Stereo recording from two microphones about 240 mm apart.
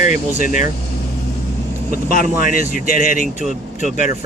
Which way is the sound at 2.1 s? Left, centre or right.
Left.